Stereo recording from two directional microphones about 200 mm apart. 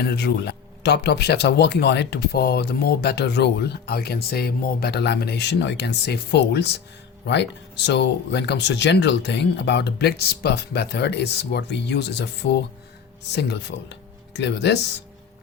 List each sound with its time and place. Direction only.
0.1 s speech: 55° left (ahead or behind)